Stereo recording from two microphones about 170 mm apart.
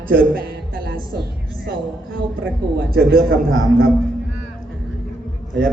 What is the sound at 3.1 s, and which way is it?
Speech, 60° right (ahead or behind).